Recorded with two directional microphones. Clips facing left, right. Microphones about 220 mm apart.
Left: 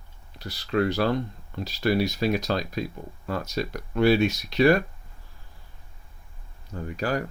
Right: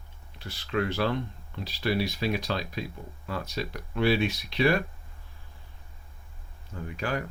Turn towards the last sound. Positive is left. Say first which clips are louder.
# left 4 dB
turn(degrees=40)  # may be behind; listen again after turning